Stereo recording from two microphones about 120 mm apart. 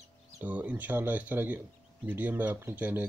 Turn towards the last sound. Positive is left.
turn(degrees=-15)  # may be behind; listen again after turning